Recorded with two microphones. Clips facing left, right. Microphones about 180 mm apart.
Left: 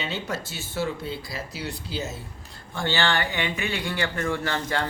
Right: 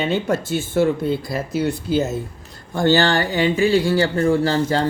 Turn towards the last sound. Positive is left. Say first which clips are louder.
# right 9 dB
turn(degrees=-30)  # may be behind; listen again after turning